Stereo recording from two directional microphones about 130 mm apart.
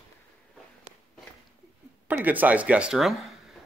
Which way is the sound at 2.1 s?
15° right (ahead or behind).